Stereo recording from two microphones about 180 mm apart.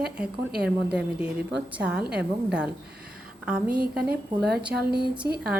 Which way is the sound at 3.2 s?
5° right (ahead or behind).